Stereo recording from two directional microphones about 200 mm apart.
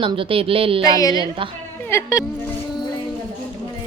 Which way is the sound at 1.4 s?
25° right (ahead or behind).